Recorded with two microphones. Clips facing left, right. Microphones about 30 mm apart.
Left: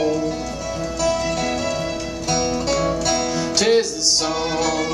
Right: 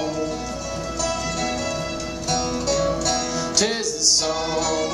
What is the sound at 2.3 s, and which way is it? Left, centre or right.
Music, centre.